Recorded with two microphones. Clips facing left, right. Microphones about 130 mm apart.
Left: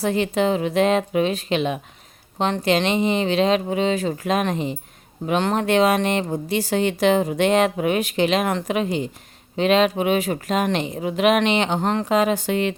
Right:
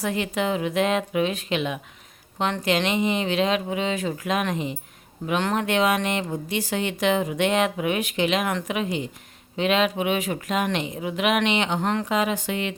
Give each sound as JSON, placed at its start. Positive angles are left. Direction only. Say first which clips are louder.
{"t": 0.0, "sound": "speech", "louder": "left 5 dB", "side_deg": 30}